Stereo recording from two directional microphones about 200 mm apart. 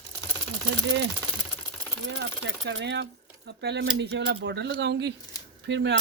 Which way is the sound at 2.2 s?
60° right (ahead or behind).